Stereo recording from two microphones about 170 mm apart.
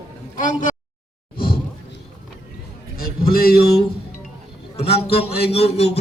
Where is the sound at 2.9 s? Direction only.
60° left (ahead or behind).